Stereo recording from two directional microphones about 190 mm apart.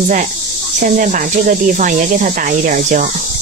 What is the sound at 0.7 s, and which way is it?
Speech, 45° right (ahead or behind).